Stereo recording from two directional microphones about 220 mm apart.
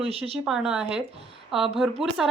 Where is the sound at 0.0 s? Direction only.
25° right (ahead or behind).